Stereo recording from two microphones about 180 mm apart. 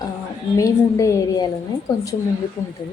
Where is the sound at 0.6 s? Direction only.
15° left (ahead or behind).